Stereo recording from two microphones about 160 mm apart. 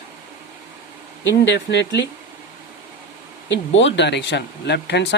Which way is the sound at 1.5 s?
90° left.